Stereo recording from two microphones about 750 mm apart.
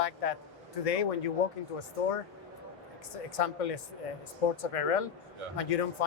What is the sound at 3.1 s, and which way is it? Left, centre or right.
Speech, left.